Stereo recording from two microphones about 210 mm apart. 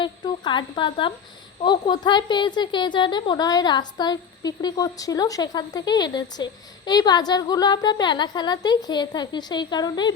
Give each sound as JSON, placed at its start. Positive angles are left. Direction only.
{"t": 0.0, "sound": "a woman's voice", "side_deg": 20}